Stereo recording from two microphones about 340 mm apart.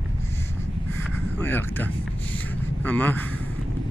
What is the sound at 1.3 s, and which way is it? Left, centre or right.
Speech, centre.